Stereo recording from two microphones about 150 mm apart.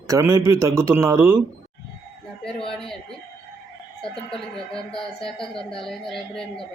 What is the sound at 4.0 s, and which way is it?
Speech, 5° left (ahead or behind).